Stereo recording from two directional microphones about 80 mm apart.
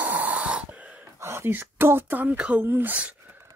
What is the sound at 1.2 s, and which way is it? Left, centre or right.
Speech, right.